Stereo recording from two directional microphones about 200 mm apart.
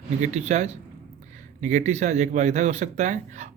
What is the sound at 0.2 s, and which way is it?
Speech, 35° right (ahead or behind).